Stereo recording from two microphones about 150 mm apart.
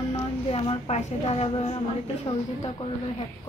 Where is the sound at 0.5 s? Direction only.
40° left (ahead or behind).